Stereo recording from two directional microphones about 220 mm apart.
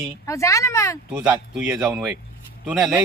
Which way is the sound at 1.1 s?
5° right (ahead or behind).